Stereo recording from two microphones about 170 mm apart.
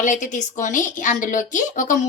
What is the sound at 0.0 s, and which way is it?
A woman's voice, 45° left (ahead or behind).